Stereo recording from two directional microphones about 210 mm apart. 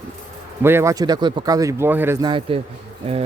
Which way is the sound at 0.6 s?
10° right (ahead or behind).